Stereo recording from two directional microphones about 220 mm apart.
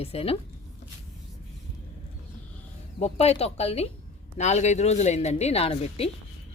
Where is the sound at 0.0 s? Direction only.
25° left (ahead or behind).